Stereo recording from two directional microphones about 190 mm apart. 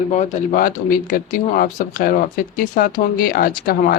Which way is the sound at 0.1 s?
40° left (ahead or behind).